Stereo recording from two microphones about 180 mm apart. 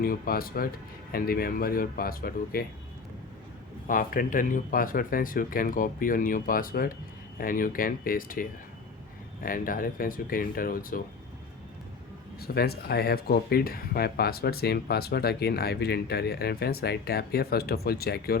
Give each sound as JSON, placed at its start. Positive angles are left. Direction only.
{"t": 0.0, "sound": "speech", "side_deg": 55}
{"t": 3.8, "sound": "speech", "side_deg": 50}
{"t": 12.4, "sound": "speech", "side_deg": 60}